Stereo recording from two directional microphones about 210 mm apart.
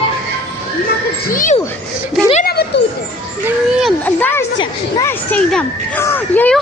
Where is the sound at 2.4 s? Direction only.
50° left (ahead or behind).